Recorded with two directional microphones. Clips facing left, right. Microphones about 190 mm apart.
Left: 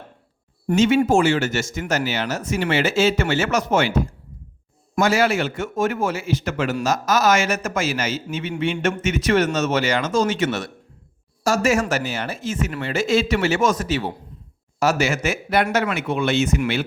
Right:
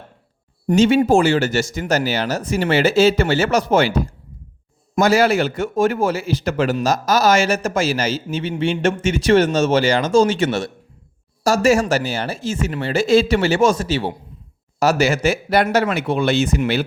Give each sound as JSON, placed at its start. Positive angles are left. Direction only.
{"t": 0.8, "sound": "a man's voice", "side_deg": -35}